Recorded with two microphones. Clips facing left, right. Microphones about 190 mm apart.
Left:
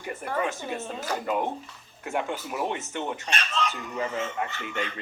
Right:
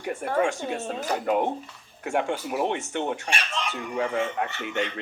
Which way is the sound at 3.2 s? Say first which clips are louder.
Left 1 dB; 15° right (ahead or behind).